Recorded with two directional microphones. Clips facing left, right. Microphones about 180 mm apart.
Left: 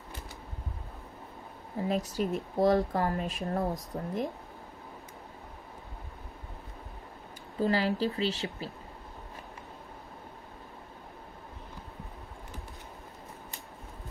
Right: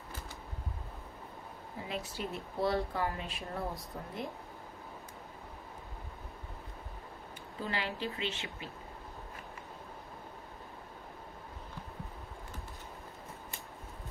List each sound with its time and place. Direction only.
1.9 s speech: 40° left (ahead or behind)
7.6 s speech: 40° left (ahead or behind)